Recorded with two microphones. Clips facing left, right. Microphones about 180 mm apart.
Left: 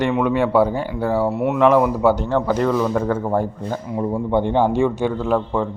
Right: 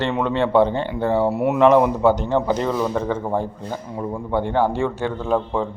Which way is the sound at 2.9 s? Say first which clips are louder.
Left 2 dB; 5° left (ahead or behind).